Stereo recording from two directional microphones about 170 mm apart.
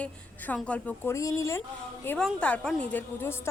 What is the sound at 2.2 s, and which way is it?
Speech, 5° left (ahead or behind).